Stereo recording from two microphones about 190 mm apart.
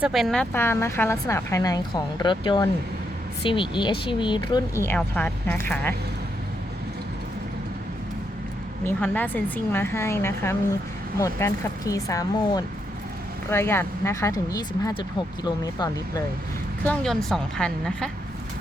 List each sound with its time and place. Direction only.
0.0 s speech: centre (ahead or behind); by 4.6 s 25° left (ahead or behind)
4.8 s speech: 10° left (ahead or behind)
8.8 s speech: 10° left (ahead or behind)
16.8 s a woman's voice: 5° left (ahead or behind)